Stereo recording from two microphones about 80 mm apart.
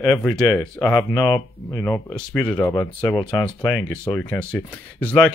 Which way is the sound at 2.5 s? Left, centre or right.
Left.